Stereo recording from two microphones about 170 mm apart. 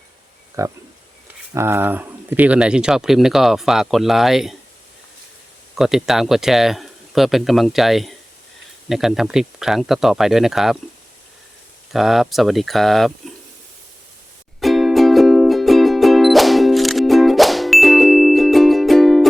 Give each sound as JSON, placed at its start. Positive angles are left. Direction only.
{"t": 0.6, "sound": "speech", "side_deg": -20}
{"t": 5.7, "sound": "speech", "side_deg": 0}
{"t": 11.9, "sound": "speech", "side_deg": 0}
{"t": 14.6, "sound": "music", "side_deg": 0}